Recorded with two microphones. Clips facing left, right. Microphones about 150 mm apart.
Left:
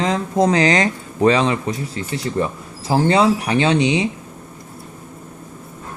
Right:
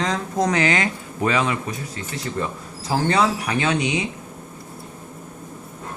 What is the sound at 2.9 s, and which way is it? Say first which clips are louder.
A man's voice: left 5 dB; 25° left (ahead or behind).